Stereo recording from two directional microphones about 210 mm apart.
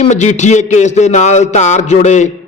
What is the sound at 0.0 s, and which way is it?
A man's voice, 35° left (ahead or behind).